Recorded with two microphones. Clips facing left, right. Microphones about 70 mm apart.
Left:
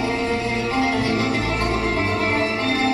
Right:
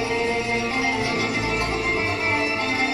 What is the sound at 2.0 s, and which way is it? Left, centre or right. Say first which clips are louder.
Music: left 3 dB; centre.